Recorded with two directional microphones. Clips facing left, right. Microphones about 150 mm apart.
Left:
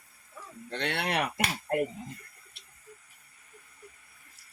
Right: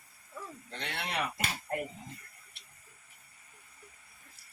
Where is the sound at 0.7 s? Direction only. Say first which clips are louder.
Left 7 dB; 70° left (ahead or behind).